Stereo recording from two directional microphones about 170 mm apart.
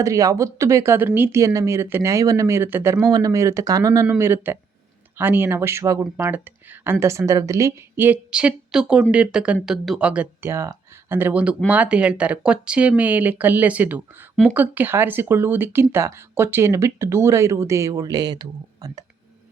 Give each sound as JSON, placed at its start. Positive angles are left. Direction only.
{"t": 0.0, "sound": "speech", "side_deg": -20}